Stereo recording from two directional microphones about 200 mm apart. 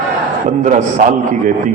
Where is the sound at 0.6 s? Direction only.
40° right (ahead or behind).